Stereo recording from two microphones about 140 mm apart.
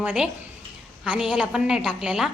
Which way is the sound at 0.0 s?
10° right (ahead or behind).